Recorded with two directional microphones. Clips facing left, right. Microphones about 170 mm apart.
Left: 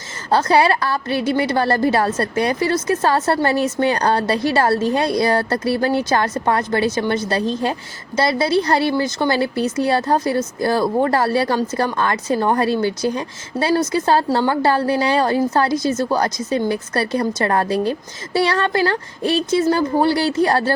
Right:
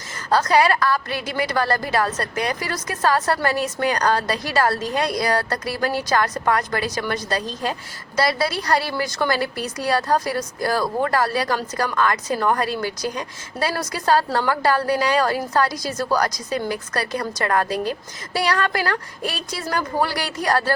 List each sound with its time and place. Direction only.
0.3 s a woman's voice: 25° left (ahead or behind)